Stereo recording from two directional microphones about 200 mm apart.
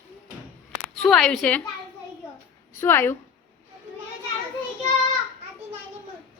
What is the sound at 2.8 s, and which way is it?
Speech, 10° left (ahead or behind).